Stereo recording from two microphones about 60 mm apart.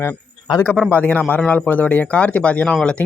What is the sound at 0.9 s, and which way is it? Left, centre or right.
Speech, left.